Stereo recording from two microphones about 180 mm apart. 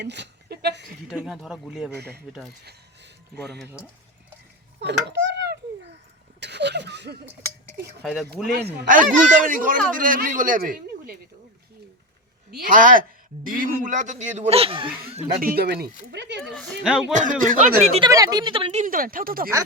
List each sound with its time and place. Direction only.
0.0 s a sound: 70° right (ahead or behind)
1.1 s speech: 5° right (ahead or behind)
2.0 s speech: 65° right (ahead or behind)
2.6 s a sound: 65° right (ahead or behind)
4.8 s a sound: 70° right (ahead or behind)
7.8 s speech: 65° right (ahead or behind)
8.0 s speech: centre (ahead or behind)
8.9 s speech: 45° right (ahead or behind)
12.5 s speech: 55° right (ahead or behind); by 14.8 s 30° right (ahead or behind)
15.4 s speech: 55° right (ahead or behind); by 16.4 s 70° right (ahead or behind)
16.6 s speech: centre (ahead or behind)
17.1 s speech: 45° right (ahead or behind)
18.0 s speech: 20° right (ahead or behind); by 19.5 s 55° right (ahead or behind)